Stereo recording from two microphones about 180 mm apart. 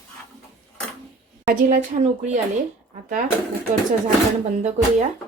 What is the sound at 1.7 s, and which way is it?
Speech, 40° right (ahead or behind).